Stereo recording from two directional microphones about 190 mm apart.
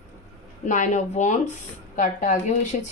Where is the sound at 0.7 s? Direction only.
40° left (ahead or behind).